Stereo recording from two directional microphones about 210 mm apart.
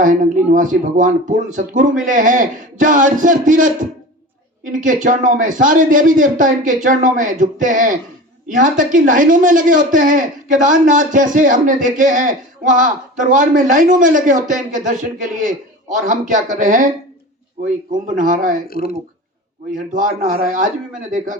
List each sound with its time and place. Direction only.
0.0 s a man's voice: 40° right (ahead or behind)
19.7 s a man's voice: 40° right (ahead or behind)